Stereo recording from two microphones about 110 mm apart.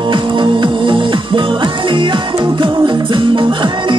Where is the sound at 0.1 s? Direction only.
50° right (ahead or behind).